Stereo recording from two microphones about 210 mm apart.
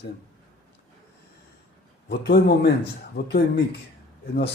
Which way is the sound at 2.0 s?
50° left (ahead or behind).